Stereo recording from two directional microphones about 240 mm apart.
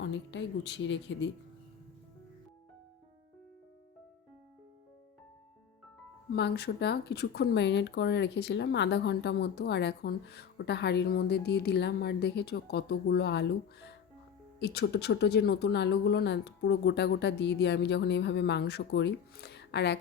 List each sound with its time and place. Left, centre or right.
0.0 s speech: left
6.3 s speech: left